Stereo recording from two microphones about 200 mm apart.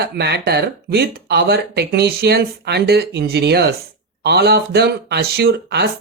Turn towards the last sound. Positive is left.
turn(degrees=-55)  # may be behind; listen again after turning